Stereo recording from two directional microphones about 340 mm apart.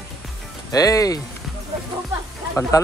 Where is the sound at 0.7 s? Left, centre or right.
Centre.